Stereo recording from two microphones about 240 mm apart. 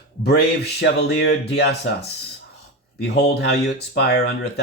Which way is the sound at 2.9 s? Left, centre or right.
Left.